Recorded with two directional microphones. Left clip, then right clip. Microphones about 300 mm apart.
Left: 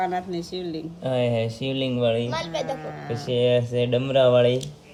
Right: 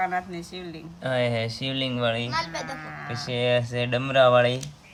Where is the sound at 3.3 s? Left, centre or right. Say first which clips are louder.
Left 3 dB; right.